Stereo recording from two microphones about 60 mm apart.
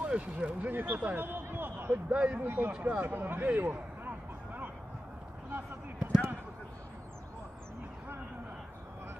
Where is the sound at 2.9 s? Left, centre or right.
Right.